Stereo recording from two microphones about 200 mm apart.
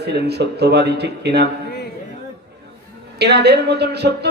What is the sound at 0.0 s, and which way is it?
A woman's voice, 55° right (ahead or behind).